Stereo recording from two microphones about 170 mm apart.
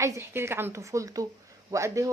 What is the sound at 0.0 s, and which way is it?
Speech, 15° right (ahead or behind).